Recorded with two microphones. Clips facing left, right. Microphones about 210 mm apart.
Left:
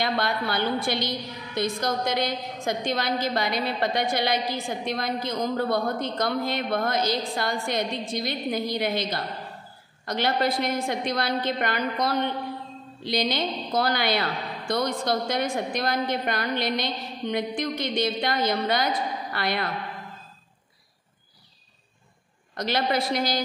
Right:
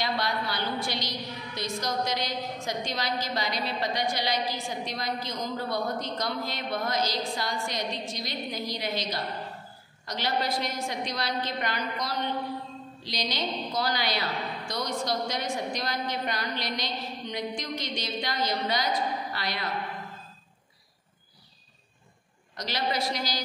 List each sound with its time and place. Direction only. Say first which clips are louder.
0.0 s a woman's voice: left 4 dB; 55° left (ahead or behind)
22.5 s a woman's voice: left 6 dB; 55° left (ahead or behind)